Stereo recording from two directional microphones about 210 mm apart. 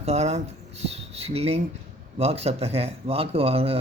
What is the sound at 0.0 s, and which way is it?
Speech, 30° right (ahead or behind).